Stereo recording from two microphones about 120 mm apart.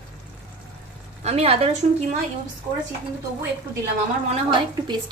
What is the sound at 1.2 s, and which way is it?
Speech, 60° right (ahead or behind).